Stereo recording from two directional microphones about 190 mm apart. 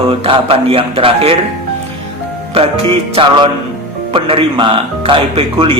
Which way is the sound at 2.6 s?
30° right (ahead or behind).